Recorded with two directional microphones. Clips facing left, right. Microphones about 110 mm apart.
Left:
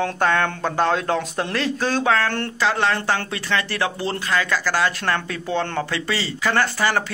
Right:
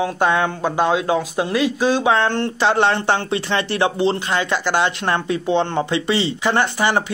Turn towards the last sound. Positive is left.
turn(degrees=-20)  # may be behind; listen again after turning